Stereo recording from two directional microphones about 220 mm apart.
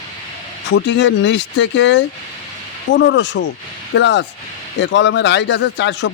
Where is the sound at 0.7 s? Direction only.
55° left (ahead or behind).